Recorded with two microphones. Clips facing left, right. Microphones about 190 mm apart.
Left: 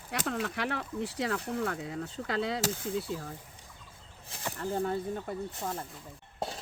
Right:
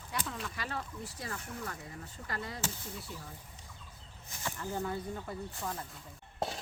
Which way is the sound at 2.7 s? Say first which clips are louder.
Left 11 dB; 90° left.